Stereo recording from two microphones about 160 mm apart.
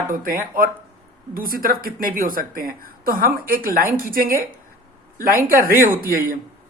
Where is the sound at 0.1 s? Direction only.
60° right (ahead or behind).